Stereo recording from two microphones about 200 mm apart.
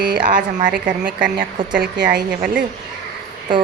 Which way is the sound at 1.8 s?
60° right (ahead or behind).